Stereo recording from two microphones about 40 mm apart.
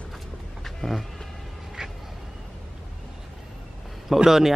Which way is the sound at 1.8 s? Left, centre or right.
Centre.